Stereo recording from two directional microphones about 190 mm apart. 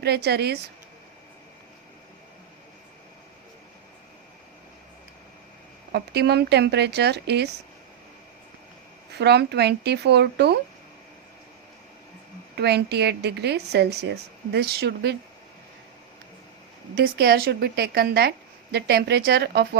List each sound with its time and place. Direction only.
0.0 s a woman's voice: 60° right (ahead or behind)
5.9 s a woman's voice: 60° right (ahead or behind)
9.1 s a woman's voice: 60° right (ahead or behind)
12.5 s a woman's voice: 60° right (ahead or behind)
16.9 s a woman's voice: 55° right (ahead or behind)